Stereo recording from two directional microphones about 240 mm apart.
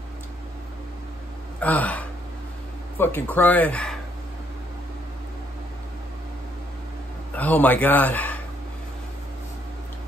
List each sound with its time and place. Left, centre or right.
1.6 s speech: centre
7.3 s speech: centre